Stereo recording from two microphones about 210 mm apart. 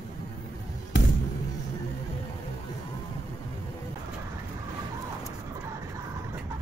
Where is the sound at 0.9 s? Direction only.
60° left (ahead or behind).